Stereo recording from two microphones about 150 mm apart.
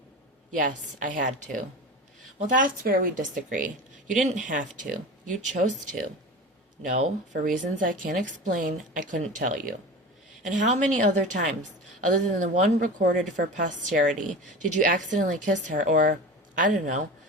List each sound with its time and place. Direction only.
0.5 s a woman's voice: 60° right (ahead or behind)
2.6 s a woman's voice: 70° right (ahead or behind)